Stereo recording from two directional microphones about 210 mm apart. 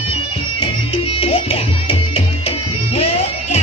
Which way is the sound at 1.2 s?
25° left (ahead or behind).